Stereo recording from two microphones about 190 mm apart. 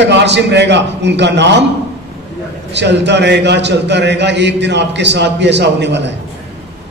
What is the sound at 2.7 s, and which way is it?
A man's voice, 65° right (ahead or behind).